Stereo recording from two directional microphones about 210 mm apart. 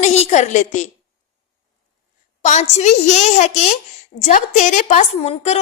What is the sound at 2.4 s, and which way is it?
A woman's voice, 35° left (ahead or behind).